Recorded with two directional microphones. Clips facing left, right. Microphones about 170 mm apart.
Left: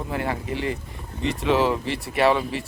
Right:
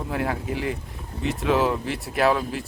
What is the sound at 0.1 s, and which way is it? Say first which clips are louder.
Speech: right 1 dB; centre (ahead or behind).